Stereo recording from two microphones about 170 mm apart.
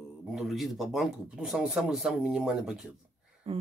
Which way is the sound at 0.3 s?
Centre (ahead or behind).